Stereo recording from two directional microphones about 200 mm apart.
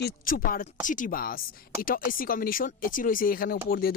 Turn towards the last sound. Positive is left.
turn(degrees=45)  # may be behind; listen again after turning